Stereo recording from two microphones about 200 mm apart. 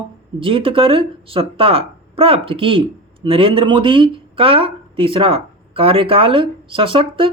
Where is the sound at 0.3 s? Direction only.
25° right (ahead or behind).